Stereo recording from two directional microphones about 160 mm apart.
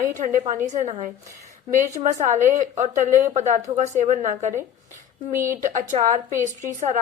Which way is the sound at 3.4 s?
45° right (ahead or behind).